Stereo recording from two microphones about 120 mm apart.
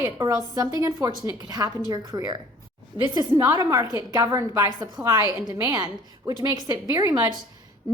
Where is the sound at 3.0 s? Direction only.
40° right (ahead or behind).